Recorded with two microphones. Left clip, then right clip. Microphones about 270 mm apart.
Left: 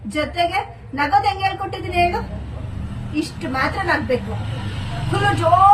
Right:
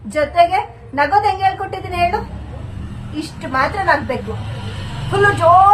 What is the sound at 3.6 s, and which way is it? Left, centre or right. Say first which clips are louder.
Speech: right 5 dB; centre.